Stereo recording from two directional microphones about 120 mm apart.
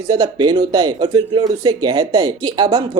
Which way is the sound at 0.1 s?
35° right (ahead or behind).